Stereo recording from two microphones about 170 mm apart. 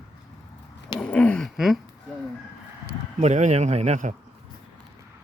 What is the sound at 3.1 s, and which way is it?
Speech, 45° right (ahead or behind).